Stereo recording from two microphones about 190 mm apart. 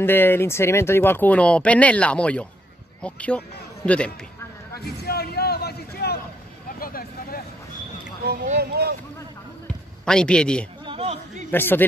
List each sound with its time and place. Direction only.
0.0 s speech: 10° left (ahead or behind)
4.7 s a sound: 55° left (ahead or behind)
6.8 s vehicle: 50° left (ahead or behind)
8.5 s speech: 55° right (ahead or behind)
10.0 s a man's voice: 5° left (ahead or behind)
10.9 s a sound: 30° right (ahead or behind)
11.5 s speech: 10° left (ahead or behind)